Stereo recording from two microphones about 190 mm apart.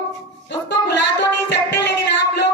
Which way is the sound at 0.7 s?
65° left (ahead or behind).